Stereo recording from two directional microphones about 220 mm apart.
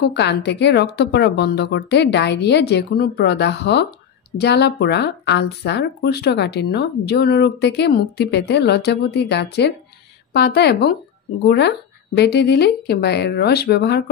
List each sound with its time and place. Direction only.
0.0 s speech: 50° left (ahead or behind)